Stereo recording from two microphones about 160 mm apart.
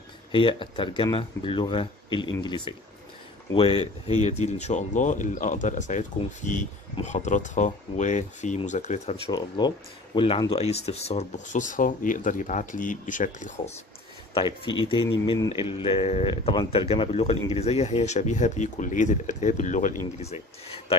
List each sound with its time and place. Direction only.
0.3 s speech: 30° left (ahead or behind)
9.3 s speech: 25° left (ahead or behind); by 13.5 s 55° left (ahead or behind)
14.3 s speech: 30° left (ahead or behind)